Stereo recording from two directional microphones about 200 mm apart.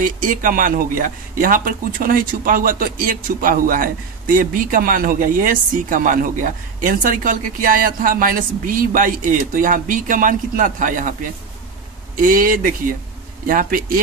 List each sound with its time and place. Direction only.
0.0 s speech: 40° right (ahead or behind)
12.2 s speech: 45° right (ahead or behind)